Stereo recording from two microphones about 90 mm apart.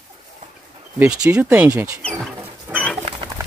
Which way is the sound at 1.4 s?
20° right (ahead or behind).